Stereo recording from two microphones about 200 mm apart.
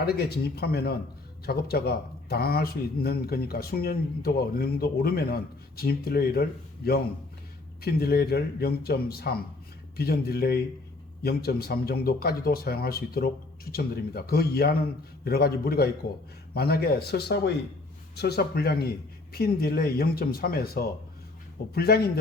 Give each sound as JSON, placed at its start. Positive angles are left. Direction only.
{"t": 0.0, "sound": "a man's voice", "side_deg": 50}